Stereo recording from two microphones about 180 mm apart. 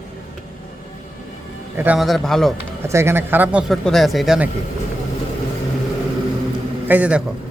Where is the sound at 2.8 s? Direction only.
15° right (ahead or behind).